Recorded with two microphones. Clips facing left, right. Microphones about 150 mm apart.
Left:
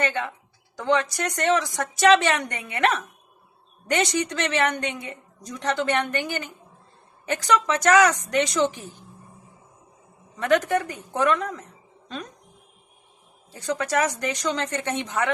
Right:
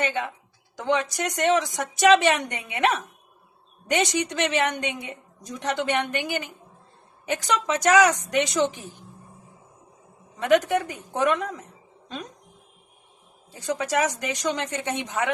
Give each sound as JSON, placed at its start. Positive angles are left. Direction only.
{"t": 0.0, "sound": "a woman's voice", "side_deg": -15}
{"t": 10.4, "sound": "a woman's voice", "side_deg": -15}
{"t": 13.5, "sound": "a woman's voice", "side_deg": -15}